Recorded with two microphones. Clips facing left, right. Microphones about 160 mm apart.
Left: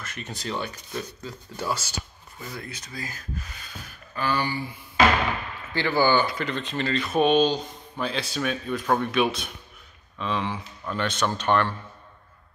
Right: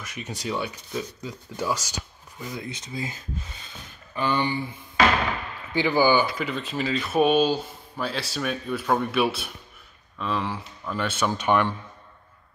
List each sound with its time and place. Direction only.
0.0 s speech: 10° right (ahead or behind)
5.7 s speech: 15° right (ahead or behind)